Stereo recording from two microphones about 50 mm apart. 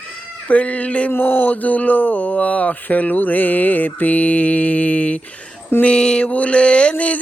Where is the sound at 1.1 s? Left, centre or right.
Left.